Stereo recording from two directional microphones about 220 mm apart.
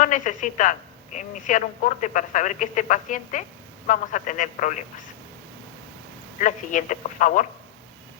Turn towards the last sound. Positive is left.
turn(degrees=35)  # may be behind; listen again after turning